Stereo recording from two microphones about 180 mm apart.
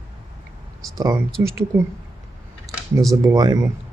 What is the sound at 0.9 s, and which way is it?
Speech, 20° right (ahead or behind).